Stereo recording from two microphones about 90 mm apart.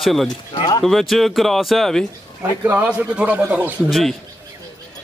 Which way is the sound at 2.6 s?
20° right (ahead or behind).